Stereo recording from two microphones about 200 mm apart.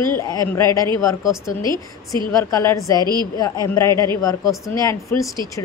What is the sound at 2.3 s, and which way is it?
A woman's voice, 15° left (ahead or behind).